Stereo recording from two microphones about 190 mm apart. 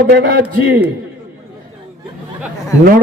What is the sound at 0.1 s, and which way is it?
Speech, 50° right (ahead or behind).